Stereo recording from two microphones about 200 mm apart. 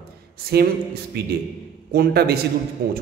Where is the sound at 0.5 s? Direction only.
55° right (ahead or behind).